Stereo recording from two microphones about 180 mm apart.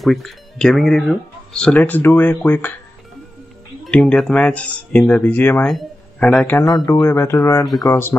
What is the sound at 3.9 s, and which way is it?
Speech, 5° left (ahead or behind).